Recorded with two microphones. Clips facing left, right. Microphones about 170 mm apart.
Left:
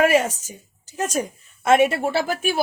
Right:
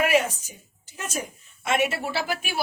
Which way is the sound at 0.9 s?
40° left (ahead or behind).